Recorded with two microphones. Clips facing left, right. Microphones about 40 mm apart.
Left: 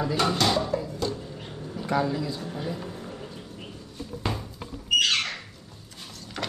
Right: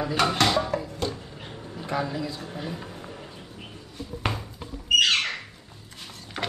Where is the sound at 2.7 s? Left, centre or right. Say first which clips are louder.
Left 2 dB; centre.